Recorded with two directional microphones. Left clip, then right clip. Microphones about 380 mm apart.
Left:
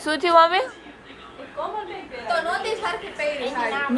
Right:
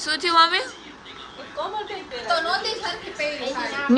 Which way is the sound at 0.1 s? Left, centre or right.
Centre.